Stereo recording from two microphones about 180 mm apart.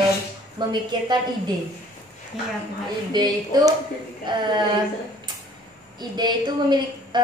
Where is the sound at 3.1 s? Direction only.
20° right (ahead or behind).